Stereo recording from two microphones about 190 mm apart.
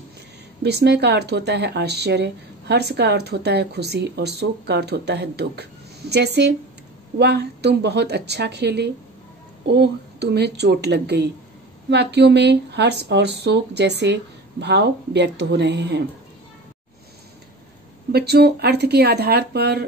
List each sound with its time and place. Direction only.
0.6 s speech: 60° right (ahead or behind)
18.1 s speech: 60° right (ahead or behind)